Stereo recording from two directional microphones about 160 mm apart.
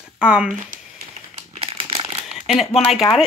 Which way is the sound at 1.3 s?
40° right (ahead or behind).